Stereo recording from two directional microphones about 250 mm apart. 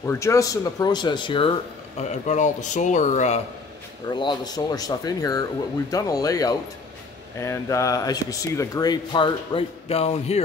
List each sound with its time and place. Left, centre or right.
0.0 s speech: centre; by 3.3 s left
4.1 s speech: centre